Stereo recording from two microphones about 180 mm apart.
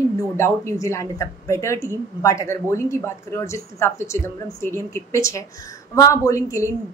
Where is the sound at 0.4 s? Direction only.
15° left (ahead or behind).